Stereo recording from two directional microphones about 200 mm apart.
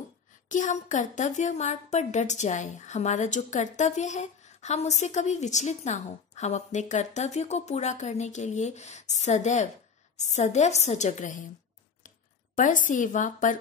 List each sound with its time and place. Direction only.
0.5 s a woman's voice: 40° left (ahead or behind)
12.5 s a woman's voice: 40° left (ahead or behind)